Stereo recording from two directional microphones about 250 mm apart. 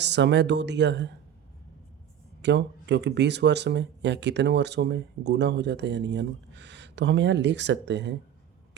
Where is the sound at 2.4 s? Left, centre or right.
Right.